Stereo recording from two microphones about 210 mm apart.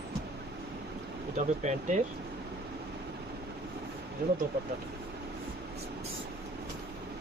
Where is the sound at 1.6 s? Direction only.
35° right (ahead or behind).